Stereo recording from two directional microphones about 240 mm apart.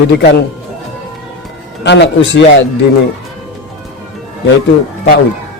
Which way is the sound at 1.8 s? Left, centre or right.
Left.